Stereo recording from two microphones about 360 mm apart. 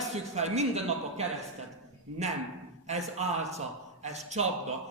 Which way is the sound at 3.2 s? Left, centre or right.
Centre.